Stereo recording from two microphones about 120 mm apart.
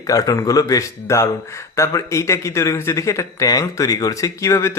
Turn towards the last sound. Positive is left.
turn(degrees=25)  # may be behind; listen again after turning